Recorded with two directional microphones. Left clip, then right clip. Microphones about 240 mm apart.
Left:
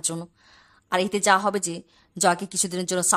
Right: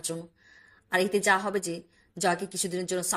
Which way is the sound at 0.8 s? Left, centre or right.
Centre.